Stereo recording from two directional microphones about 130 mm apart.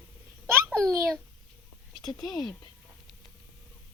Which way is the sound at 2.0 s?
30° left (ahead or behind).